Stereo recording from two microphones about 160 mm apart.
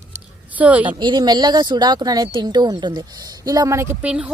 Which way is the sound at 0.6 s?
10° right (ahead or behind).